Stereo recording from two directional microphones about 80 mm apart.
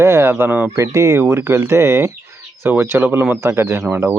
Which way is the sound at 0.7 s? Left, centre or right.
Right.